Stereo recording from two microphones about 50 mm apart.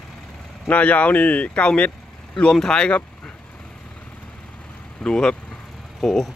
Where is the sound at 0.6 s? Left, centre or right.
Left.